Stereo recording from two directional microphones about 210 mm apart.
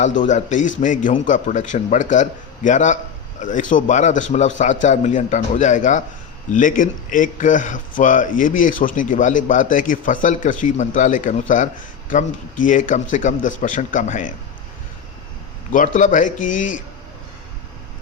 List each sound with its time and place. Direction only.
0.0 s a man's voice: 35° left (ahead or behind)
16.0 s a man's voice: 35° left (ahead or behind)